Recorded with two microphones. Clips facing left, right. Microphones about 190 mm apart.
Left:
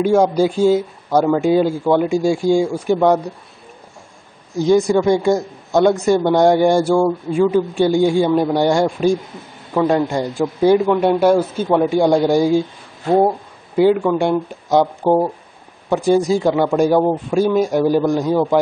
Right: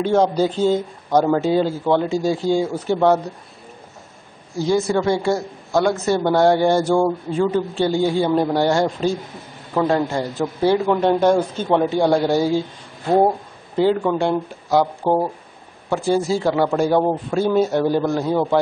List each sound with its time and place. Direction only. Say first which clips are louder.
0.0 s speech: left 3 dB; 10° left (ahead or behind)
4.6 s speech: left 5 dB; 15° left (ahead or behind)
13.8 s speech: left 4 dB; 10° left (ahead or behind)